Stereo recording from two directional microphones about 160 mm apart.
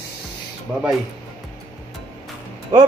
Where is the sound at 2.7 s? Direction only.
25° right (ahead or behind).